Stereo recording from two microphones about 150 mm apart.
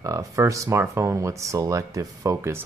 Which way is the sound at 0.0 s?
20° right (ahead or behind).